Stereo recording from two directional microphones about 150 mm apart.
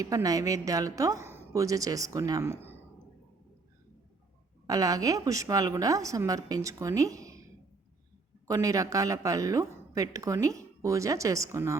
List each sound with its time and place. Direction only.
0.0 s speech: 25° right (ahead or behind)
4.6 s speech: 25° right (ahead or behind)
8.4 s speech: 20° right (ahead or behind)